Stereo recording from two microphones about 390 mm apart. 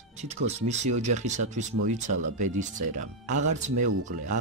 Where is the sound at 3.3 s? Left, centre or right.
Centre.